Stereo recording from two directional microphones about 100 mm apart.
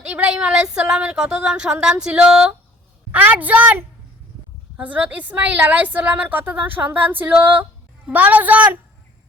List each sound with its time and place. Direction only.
0.0 s a woman's voice: 15° right (ahead or behind)